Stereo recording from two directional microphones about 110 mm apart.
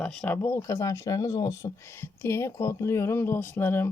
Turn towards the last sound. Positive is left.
turn(degrees=20)  # may be behind; listen again after turning